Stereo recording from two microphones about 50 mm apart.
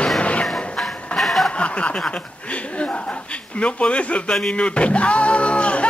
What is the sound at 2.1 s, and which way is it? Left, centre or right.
Chuckle, left.